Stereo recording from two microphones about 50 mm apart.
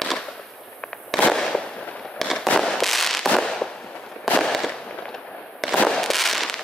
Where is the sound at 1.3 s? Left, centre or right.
Centre.